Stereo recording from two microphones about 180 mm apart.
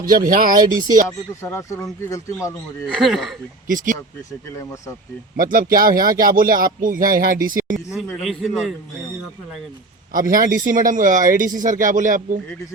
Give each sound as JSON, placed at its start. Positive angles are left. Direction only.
{"t": 0.3, "sound": "speech", "side_deg": -50}
{"t": 1.3, "sound": "speech", "side_deg": 15}
{"t": 2.8, "sound": "a man's voice", "side_deg": 5}
{"t": 3.7, "sound": "speech", "side_deg": -45}
{"t": 4.3, "sound": "speech", "side_deg": 15}
{"t": 5.4, "sound": "speech", "side_deg": -50}
{"t": 8.1, "sound": "a man's voice", "side_deg": 0}
{"t": 10.1, "sound": "speech", "side_deg": -50}